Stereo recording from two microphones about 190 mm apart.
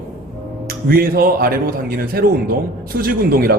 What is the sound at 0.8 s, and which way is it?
A man's voice, 50° right (ahead or behind).